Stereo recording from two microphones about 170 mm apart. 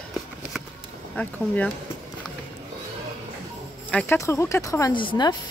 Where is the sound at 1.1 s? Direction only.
10° left (ahead or behind).